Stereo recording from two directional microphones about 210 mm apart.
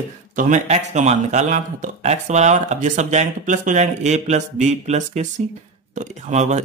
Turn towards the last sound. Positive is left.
turn(degrees=-35)  # may be behind; listen again after turning